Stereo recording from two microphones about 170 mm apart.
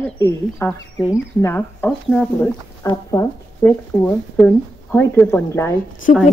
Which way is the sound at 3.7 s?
10° left (ahead or behind).